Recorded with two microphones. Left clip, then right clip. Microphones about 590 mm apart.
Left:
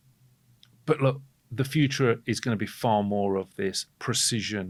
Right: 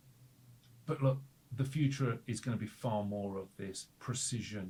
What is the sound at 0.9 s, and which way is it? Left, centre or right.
Speech, left.